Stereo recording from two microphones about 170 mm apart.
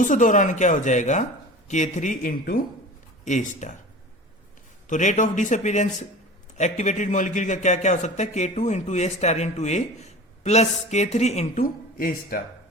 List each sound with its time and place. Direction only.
0.0 s a man's voice: 50° left (ahead or behind)
4.9 s a man's voice: 45° left (ahead or behind)
11.6 s speech: 55° left (ahead or behind)